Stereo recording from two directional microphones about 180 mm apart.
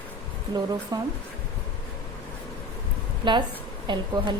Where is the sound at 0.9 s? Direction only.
20° right (ahead or behind).